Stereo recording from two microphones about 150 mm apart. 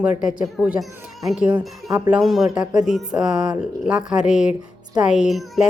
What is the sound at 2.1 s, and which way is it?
Speech, 5° right (ahead or behind).